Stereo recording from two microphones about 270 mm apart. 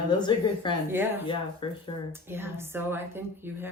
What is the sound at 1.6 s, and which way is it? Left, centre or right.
Speech, centre.